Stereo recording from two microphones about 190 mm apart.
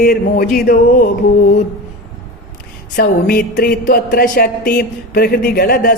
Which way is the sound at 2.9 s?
50° left (ahead or behind).